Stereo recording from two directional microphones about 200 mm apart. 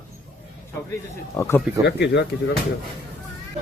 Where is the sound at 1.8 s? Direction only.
55° left (ahead or behind).